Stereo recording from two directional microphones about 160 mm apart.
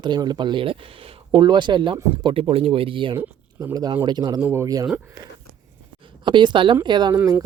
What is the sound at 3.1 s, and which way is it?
Speech, 20° right (ahead or behind).